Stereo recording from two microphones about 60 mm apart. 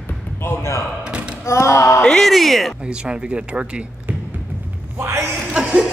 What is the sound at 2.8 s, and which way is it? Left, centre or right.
Speech, centre.